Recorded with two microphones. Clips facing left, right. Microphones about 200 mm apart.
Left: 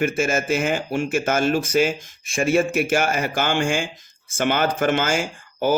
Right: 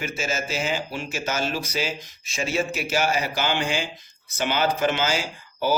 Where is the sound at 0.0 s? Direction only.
55° left (ahead or behind).